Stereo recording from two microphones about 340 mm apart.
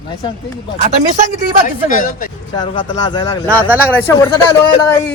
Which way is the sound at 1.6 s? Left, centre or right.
Left.